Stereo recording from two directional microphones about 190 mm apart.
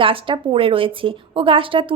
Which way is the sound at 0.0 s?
30° right (ahead or behind).